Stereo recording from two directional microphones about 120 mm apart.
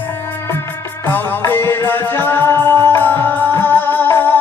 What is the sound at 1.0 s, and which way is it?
Music, 15° left (ahead or behind).